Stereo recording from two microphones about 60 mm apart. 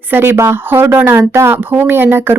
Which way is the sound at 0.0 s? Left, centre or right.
Right.